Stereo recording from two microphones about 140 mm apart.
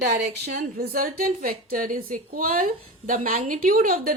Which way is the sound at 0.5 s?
90° right.